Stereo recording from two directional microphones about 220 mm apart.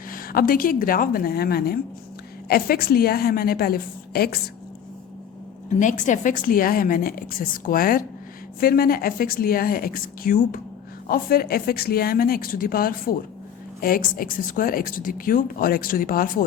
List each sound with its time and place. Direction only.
0.1 s a woman's voice: 40° left (ahead or behind)
5.6 s a woman's voice: 35° left (ahead or behind)